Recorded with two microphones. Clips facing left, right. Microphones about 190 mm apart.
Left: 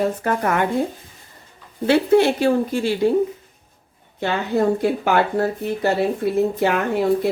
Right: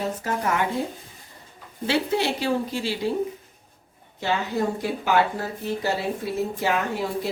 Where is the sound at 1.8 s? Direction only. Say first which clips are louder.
Left 9 dB; 55° left (ahead or behind).